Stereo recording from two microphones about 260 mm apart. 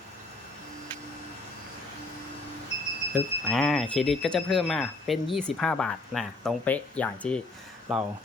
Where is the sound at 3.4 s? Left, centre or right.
Centre.